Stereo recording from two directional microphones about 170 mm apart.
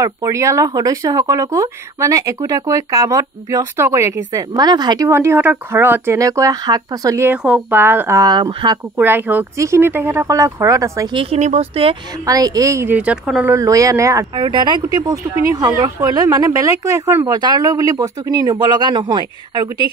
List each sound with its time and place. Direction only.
0.0 s speech: 20° right (ahead or behind)
8.9 s speech: 10° right (ahead or behind)
11.1 s speech: 40° right (ahead or behind)
12.3 s speech: 20° right (ahead or behind); by 13.5 s 5° right (ahead or behind)
13.5 s speech: 20° right (ahead or behind)